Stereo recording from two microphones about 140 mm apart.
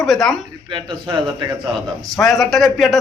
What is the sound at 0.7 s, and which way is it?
Speech, 35° right (ahead or behind).